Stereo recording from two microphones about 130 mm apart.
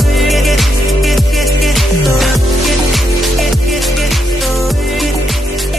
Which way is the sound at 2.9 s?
Centre (ahead or behind).